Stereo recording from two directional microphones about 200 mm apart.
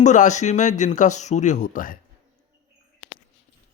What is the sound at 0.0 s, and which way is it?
Speech, 35° left (ahead or behind).